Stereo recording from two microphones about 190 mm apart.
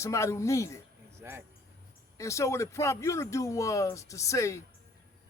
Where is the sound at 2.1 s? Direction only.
15° left (ahead or behind).